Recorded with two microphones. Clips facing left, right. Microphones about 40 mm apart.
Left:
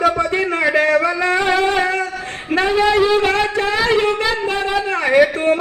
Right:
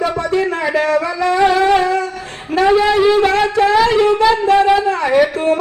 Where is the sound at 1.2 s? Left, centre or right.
Left.